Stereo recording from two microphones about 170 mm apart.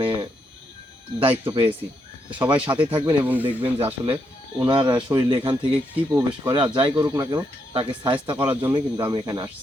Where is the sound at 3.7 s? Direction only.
30° right (ahead or behind).